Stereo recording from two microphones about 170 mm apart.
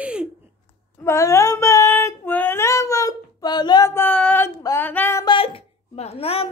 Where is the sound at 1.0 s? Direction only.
15° left (ahead or behind).